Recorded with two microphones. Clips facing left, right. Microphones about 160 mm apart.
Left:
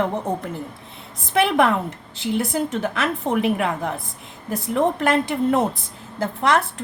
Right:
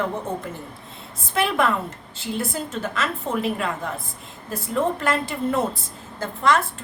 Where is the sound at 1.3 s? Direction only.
65° left (ahead or behind).